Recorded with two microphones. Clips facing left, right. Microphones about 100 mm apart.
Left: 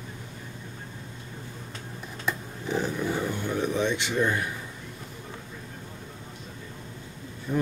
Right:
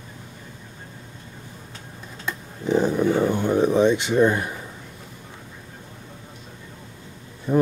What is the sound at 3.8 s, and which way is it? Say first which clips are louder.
Speech: right 8 dB; 20° right (ahead or behind).